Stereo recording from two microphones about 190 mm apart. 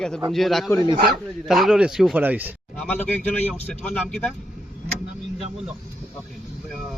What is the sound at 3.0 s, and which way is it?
Speech, 10° left (ahead or behind).